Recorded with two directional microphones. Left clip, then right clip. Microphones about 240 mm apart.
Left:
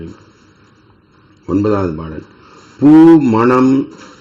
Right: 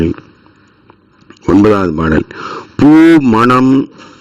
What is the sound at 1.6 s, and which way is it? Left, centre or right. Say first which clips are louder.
A man's voice: right 6 dB; right.